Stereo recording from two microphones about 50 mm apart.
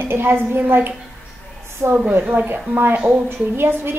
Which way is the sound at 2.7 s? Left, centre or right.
Right.